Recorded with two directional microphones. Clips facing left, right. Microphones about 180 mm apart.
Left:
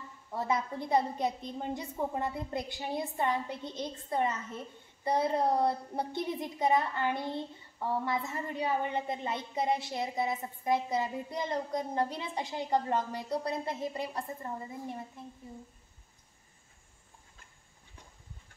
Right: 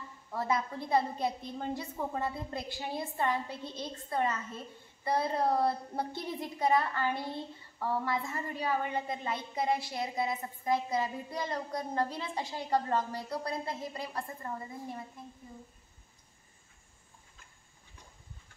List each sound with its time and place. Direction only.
0.3 s a woman's voice: 20° left (ahead or behind)